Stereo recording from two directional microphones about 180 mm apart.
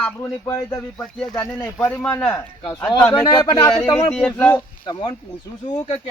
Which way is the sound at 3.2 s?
20° left (ahead or behind).